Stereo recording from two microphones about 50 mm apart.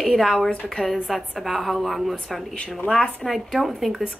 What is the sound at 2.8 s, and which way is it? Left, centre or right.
Speech, left.